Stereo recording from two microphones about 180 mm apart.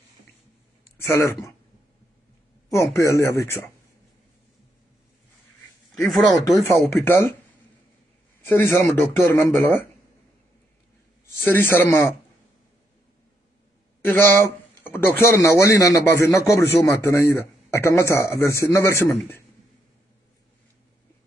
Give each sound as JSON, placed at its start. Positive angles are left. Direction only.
{"t": 0.9, "sound": "a man's voice", "side_deg": 15}
{"t": 2.7, "sound": "a man's voice", "side_deg": 15}
{"t": 5.9, "sound": "speech", "side_deg": 0}
{"t": 6.6, "sound": "a man's voice", "side_deg": 15}
{"t": 8.5, "sound": "a man's voice", "side_deg": 10}
{"t": 11.3, "sound": "a man's voice", "side_deg": 10}
{"t": 14.0, "sound": "a man's voice", "side_deg": 10}